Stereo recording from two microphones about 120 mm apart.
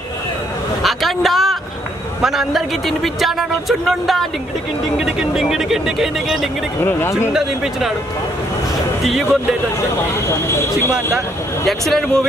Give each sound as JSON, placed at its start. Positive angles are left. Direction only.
{"t": 0.8, "sound": "vehicle", "side_deg": 0}
{"t": 2.2, "sound": "speech", "side_deg": 0}
{"t": 6.8, "sound": "speech", "side_deg": 20}
{"t": 9.0, "sound": "speech", "side_deg": 0}
{"t": 11.6, "sound": "speech", "side_deg": 0}